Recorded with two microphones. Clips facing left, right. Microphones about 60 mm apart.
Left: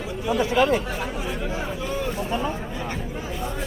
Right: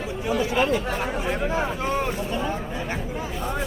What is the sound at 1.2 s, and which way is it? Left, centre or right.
Speech, right.